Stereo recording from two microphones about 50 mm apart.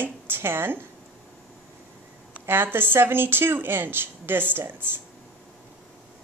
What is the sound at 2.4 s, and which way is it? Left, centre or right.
Speech, right.